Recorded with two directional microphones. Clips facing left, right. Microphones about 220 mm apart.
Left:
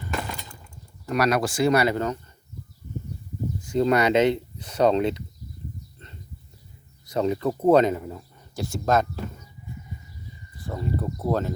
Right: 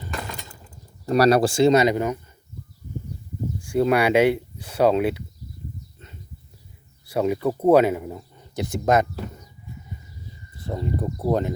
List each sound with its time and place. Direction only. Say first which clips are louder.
1.0 s speech: right 6 dB; 35° right (ahead or behind); by 2.1 s 15° right (ahead or behind)
3.6 s speech: right 1 dB; 10° right (ahead or behind)
7.0 s speech: right 2 dB; 10° right (ahead or behind)
10.6 s speech: right 2 dB; 20° right (ahead or behind)